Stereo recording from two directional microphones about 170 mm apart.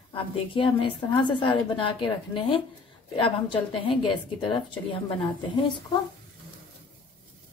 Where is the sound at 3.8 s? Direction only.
30° left (ahead or behind).